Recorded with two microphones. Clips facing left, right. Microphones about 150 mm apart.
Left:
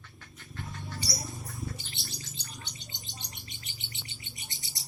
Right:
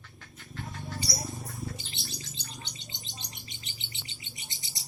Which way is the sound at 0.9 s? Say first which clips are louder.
Right 2 dB; 25° right (ahead or behind).